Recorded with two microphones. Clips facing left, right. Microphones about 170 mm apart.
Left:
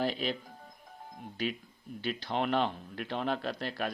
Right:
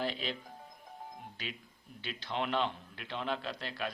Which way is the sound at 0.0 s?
45° left (ahead or behind).